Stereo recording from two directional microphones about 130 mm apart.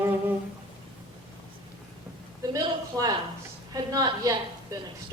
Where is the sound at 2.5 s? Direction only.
25° right (ahead or behind).